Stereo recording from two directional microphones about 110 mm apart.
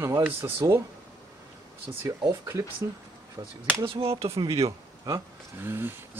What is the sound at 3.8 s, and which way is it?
Speech, 60° right (ahead or behind).